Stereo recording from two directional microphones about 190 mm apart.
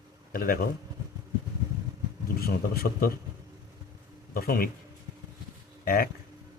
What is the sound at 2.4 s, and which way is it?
Speech, 55° left (ahead or behind).